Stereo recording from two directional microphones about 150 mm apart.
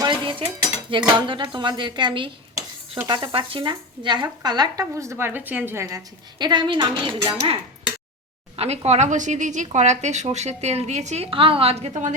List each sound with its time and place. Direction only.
0.0 s cutlery: 30° right (ahead or behind)
0.9 s a woman's voice: 35° right (ahead or behind); by 6.0 s 20° right (ahead or behind)
6.4 s a woman's voice: 30° right (ahead or behind)
8.5 s a woman's voice: 45° right (ahead or behind)